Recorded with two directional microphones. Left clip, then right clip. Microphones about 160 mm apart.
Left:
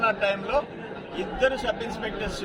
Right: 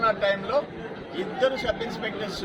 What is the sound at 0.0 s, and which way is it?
A man's voice, 20° left (ahead or behind).